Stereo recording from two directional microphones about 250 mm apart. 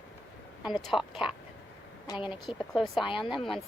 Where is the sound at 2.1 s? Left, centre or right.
Centre.